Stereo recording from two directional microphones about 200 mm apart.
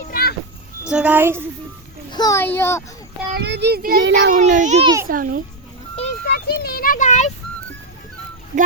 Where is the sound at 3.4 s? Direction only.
55° right (ahead or behind).